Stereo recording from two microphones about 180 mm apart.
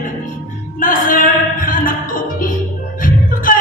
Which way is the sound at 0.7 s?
45° left (ahead or behind).